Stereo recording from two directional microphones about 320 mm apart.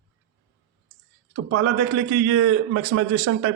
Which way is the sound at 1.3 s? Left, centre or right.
Right.